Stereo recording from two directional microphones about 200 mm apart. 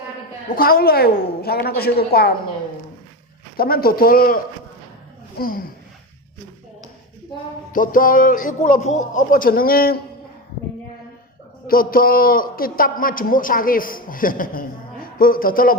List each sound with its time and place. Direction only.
0.5 s a man's voice: 45° left (ahead or behind)
3.6 s a man's voice: 50° left (ahead or behind)
5.4 s a man's voice: 45° left (ahead or behind)
7.7 s a man's voice: 45° left (ahead or behind)
11.7 s a man's voice: 45° left (ahead or behind)